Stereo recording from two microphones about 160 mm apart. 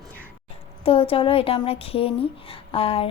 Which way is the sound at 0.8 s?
35° left (ahead or behind).